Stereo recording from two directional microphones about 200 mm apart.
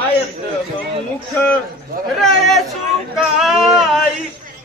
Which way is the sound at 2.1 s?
Centre (ahead or behind).